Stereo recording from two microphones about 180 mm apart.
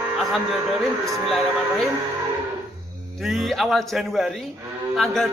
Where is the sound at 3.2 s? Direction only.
Centre (ahead or behind).